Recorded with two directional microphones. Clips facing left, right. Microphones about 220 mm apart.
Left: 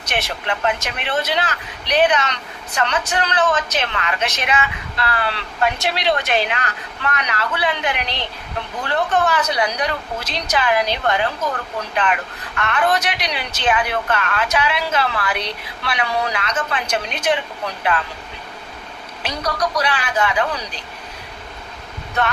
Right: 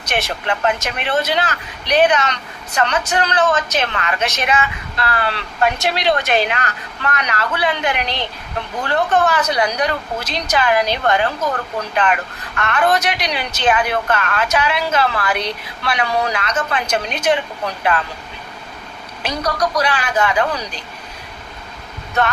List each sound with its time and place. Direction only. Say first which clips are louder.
0.1 s speech: right 3 dB; 45° right (ahead or behind)
19.2 s speech: right 3 dB; 45° right (ahead or behind)